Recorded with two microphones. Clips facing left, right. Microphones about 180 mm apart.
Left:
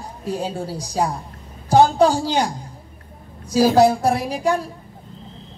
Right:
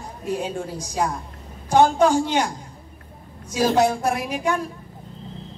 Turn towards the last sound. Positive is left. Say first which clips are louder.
# left 3 dB
turn(degrees=35)  # may be behind; listen again after turning